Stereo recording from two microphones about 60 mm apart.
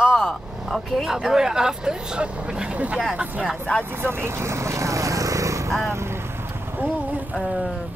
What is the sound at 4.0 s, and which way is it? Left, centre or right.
Vehicle, right.